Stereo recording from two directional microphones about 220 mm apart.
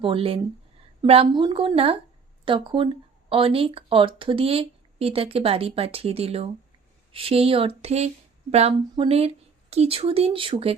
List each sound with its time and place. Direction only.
0.0 s speech: 25° right (ahead or behind)